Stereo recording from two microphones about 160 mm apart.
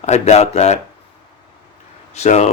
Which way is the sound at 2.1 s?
45° left (ahead or behind).